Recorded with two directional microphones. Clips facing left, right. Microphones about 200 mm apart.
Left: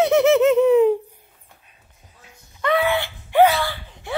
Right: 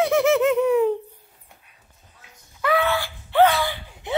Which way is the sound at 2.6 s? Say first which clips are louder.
Left 1 dB; centre (ahead or behind).